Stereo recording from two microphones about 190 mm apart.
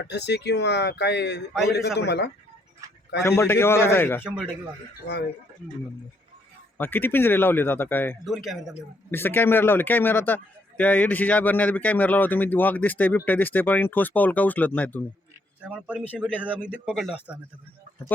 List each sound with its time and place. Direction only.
0.0 s speech: 65° left (ahead or behind)
3.2 s a man's voice: 15° left (ahead or behind)
5.0 s speech: 60° left (ahead or behind)
6.7 s a man's voice: 10° left (ahead or behind)
8.2 s speech: centre (ahead or behind)
9.0 s a man's voice: 10° left (ahead or behind)
15.6 s speech: 5° right (ahead or behind)